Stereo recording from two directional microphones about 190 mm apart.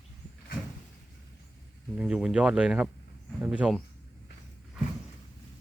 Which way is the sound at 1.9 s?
5° right (ahead or behind).